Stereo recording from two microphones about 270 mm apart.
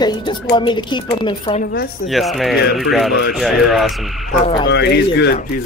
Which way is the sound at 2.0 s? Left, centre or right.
Centre.